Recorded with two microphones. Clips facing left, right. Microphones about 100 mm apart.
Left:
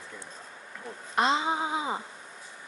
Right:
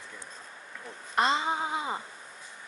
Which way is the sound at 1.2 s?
Centre (ahead or behind).